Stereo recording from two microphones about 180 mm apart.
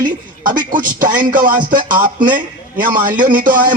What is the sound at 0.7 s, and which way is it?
Music, 50° right (ahead or behind).